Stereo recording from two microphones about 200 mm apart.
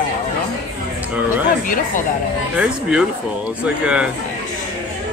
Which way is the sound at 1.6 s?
45° left (ahead or behind).